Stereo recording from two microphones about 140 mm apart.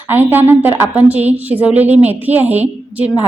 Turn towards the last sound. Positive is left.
turn(degrees=-10)  # may be behind; listen again after turning